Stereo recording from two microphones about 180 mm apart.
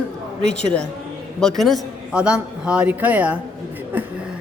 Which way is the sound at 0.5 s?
5° left (ahead or behind).